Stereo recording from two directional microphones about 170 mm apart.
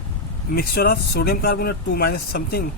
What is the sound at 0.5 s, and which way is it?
Speech, 60° left (ahead or behind).